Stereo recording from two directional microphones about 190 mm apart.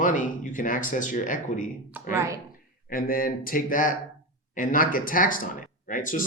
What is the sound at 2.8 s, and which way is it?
A man's voice, 50° left (ahead or behind).